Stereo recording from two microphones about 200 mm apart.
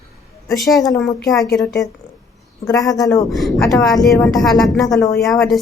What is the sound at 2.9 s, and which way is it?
Speech, 15° left (ahead or behind).